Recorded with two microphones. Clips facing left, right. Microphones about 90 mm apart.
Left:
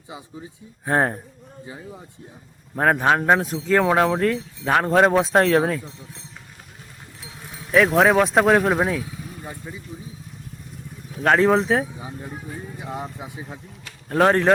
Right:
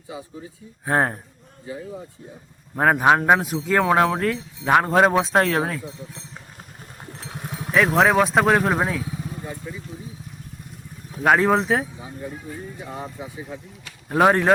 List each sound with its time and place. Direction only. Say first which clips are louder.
0.1 s speech: right 3 dB; 20° left (ahead or behind)
0.9 s speech: even; centre (ahead or behind)
1.7 s speech: right 7 dB; 25° left (ahead or behind)
2.7 s speech: right 2 dB; 5° right (ahead or behind)
7.2 s sheep: right 7 dB; 55° right (ahead or behind)
7.7 s speech: left 1 dB; centre (ahead or behind)
9.4 s speech: right 2 dB; 20° left (ahead or behind)
11.2 s speech: left 1 dB; 5° right (ahead or behind)
11.9 s speech: even; 20° left (ahead or behind)
13.8 s a sound: right 1 dB; 10° right (ahead or behind)